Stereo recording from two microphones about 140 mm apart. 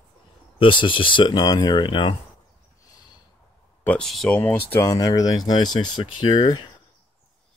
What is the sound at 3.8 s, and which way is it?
Speech, 10° left (ahead or behind).